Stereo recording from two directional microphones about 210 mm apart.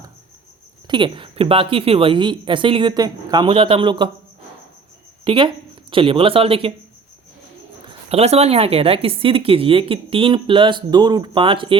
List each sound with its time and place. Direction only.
0.9 s speech: 25° right (ahead or behind)
5.2 s speech: 25° right (ahead or behind)
8.1 s speech: 30° right (ahead or behind)